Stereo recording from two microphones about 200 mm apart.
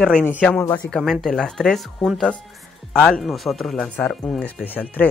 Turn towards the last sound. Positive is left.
turn(degrees=10)  # may be behind; listen again after turning